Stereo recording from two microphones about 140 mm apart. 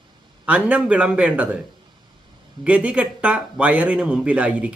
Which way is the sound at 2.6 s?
10° right (ahead or behind).